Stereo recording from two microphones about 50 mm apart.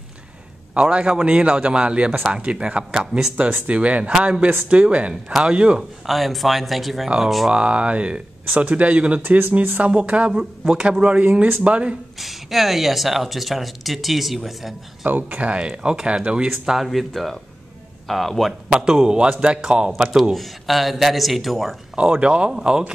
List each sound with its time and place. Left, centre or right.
0.7 s speech: right
6.0 s speech: centre
7.5 s speech: right
12.2 s speech: centre
15.0 s speech: right
15.6 s speech: centre
16.4 s speech: centre
18.7 s speech: centre
20.3 s speech: centre
21.9 s speech: right